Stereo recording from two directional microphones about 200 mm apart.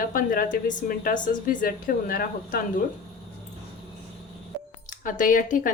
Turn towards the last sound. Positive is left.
turn(degrees=40)  # may be behind; listen again after turning